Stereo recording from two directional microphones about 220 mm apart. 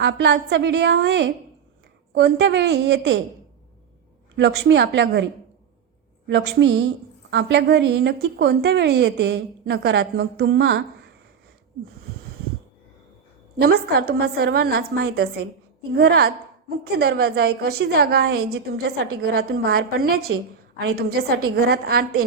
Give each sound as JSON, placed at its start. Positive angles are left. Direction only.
{"t": 0.0, "sound": "a woman's voice", "side_deg": -55}
{"t": 4.4, "sound": "a woman's voice", "side_deg": -50}
{"t": 6.2, "sound": "a woman's voice", "side_deg": -50}
{"t": 13.6, "sound": "a woman's voice", "side_deg": -45}
{"t": 20.3, "sound": "a woman's voice", "side_deg": -60}
{"t": 20.8, "sound": "a woman's voice", "side_deg": -45}